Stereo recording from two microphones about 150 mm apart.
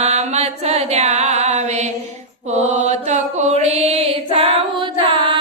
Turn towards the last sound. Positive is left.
turn(degrees=-35)  # may be behind; listen again after turning